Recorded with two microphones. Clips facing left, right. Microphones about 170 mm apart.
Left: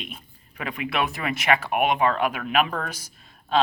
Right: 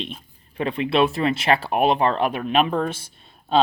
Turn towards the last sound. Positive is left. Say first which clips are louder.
# right 3 dB
turn(degrees=-30)  # may be behind; listen again after turning